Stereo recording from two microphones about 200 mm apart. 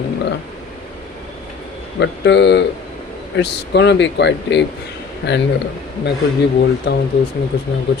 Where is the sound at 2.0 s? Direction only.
60° left (ahead or behind).